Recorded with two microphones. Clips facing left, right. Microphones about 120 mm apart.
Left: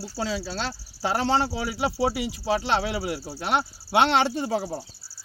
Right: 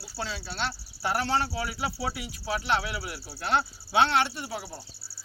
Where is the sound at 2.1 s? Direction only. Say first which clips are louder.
Left 7 dB; 90° left.